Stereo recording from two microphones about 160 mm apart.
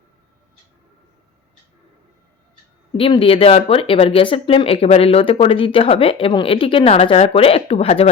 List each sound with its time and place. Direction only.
3.0 s speech: 35° left (ahead or behind)